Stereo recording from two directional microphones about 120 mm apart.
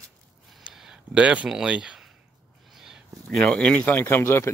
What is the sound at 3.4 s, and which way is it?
Speech, 10° left (ahead or behind).